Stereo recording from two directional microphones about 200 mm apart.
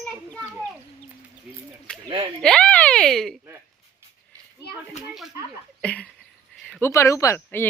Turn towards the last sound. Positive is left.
turn(degrees=15)  # may be behind; listen again after turning